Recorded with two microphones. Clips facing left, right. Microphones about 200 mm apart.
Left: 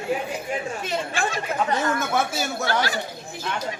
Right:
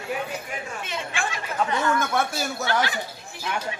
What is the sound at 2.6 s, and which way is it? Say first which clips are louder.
Speech: even; 40° left (ahead or behind).